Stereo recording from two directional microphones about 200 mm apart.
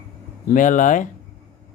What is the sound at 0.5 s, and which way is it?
Speech, 40° left (ahead or behind).